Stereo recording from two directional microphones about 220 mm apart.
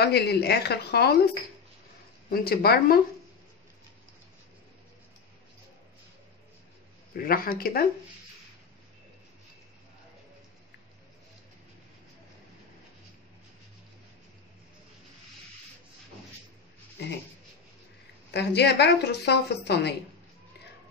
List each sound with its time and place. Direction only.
0.0 s a woman's voice: 50° left (ahead or behind)
2.3 s a woman's voice: 45° left (ahead or behind)
7.2 s a woman's voice: 40° left (ahead or behind)
18.3 s a woman's voice: 50° left (ahead or behind)